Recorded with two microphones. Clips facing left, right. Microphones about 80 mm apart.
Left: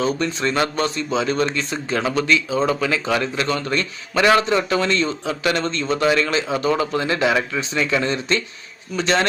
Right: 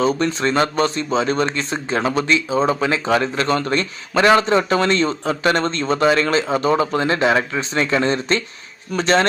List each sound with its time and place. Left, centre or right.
0.0 s speech: right